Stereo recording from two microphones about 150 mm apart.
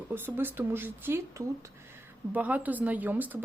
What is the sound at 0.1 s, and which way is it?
A woman's voice, 15° right (ahead or behind).